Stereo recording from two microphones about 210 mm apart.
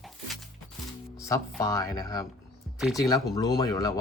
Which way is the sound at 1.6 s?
15° left (ahead or behind).